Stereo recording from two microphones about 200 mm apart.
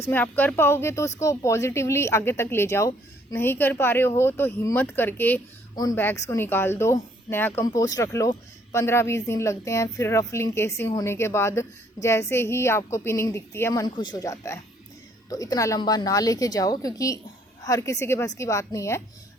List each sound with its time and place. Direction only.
0.0 s speech: 10° left (ahead or behind)